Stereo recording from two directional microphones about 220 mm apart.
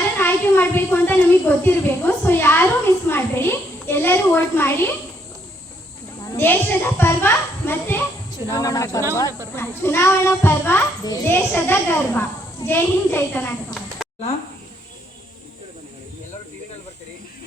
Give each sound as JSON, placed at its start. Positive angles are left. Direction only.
{"t": 0.2, "sound": "a child's voice", "side_deg": 10}
{"t": 6.3, "sound": "a child's voice", "side_deg": 10}